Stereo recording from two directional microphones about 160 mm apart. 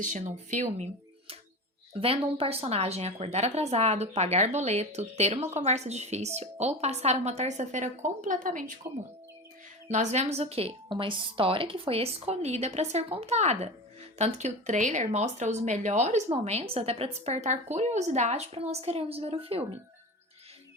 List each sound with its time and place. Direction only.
0.0 s speech: 50° right (ahead or behind)
2.0 s speech: 35° right (ahead or behind); by 8.7 s 55° right (ahead or behind)
9.9 s a woman's voice: 45° right (ahead or behind)